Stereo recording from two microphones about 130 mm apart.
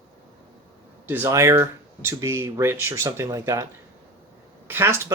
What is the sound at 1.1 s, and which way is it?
Speech, 20° right (ahead or behind).